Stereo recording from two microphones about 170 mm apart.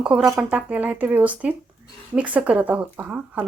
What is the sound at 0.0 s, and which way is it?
Speech, 5° right (ahead or behind).